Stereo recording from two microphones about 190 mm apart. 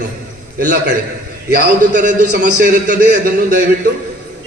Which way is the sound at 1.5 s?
45° right (ahead or behind).